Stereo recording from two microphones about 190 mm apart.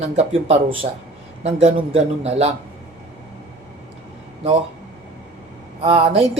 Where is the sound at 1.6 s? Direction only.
30° right (ahead or behind).